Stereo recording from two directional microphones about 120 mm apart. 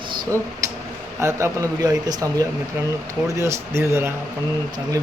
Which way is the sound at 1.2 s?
25° right (ahead or behind).